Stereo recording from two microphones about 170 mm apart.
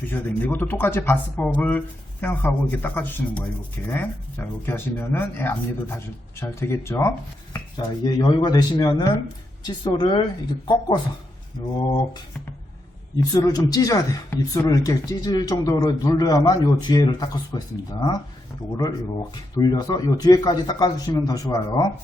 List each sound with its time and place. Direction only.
0.1 s speech: 10° left (ahead or behind)
13.1 s speech: 20° left (ahead or behind)
18.8 s speech: 20° left (ahead or behind)